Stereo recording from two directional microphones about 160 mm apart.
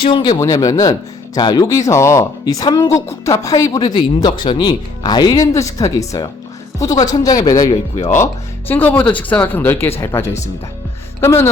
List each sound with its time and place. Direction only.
0.0 s speech: 30° left (ahead or behind)